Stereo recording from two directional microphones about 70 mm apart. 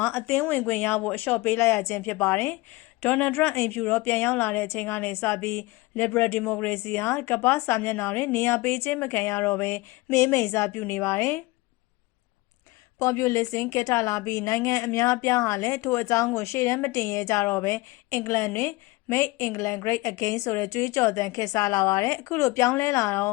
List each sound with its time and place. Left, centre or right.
0.0 s speech: left
3.0 s speech: left
13.0 s a woman's voice: left